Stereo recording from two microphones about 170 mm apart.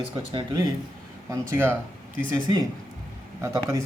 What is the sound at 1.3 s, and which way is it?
Speech, 15° right (ahead or behind).